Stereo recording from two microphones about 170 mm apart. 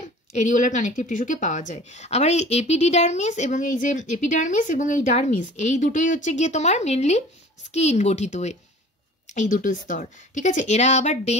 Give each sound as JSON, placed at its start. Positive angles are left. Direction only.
{"t": 0.0, "sound": "a woman's voice", "side_deg": 45}